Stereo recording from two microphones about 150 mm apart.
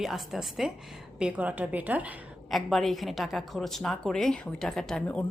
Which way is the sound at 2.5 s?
Centre (ahead or behind).